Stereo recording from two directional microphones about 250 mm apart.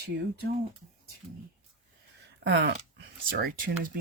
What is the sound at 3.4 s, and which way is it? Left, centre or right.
Speech, right.